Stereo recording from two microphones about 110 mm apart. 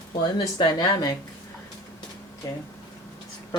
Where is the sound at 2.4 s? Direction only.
35° left (ahead or behind).